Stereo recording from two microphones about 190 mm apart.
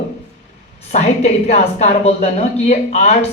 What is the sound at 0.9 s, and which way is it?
A man's voice, 35° left (ahead or behind).